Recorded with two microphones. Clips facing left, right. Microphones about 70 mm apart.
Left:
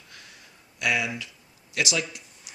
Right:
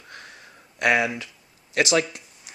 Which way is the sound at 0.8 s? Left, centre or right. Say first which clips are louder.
Right 6 dB; right.